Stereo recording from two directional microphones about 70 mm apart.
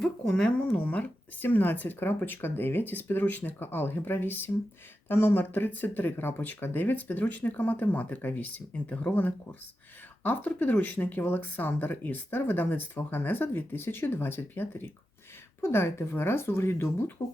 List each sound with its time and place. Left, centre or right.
0.0 s speech: centre; by 17.1 s left